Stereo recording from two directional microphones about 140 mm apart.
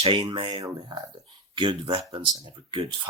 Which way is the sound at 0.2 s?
35° right (ahead or behind).